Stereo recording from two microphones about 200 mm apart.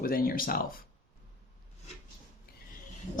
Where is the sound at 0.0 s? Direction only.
45° left (ahead or behind).